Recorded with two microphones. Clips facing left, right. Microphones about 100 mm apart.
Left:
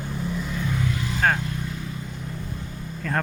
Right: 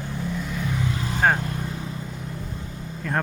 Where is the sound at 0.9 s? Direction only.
35° right (ahead or behind).